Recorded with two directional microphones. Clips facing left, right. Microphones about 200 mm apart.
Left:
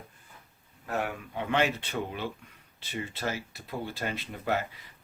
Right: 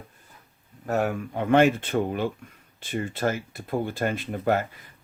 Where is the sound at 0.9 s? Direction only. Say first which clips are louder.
Right 7 dB; 45° right (ahead or behind).